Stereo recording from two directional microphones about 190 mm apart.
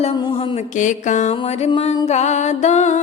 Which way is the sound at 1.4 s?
35° left (ahead or behind).